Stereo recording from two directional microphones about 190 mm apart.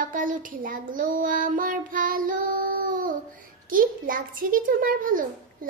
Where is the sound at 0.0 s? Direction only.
45° right (ahead or behind).